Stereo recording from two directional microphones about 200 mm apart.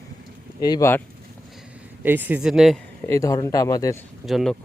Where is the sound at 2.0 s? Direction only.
10° right (ahead or behind).